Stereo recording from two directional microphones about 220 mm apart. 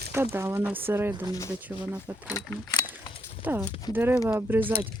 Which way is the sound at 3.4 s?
10° right (ahead or behind).